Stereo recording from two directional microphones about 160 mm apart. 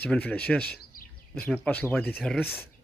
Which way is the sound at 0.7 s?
60° left (ahead or behind).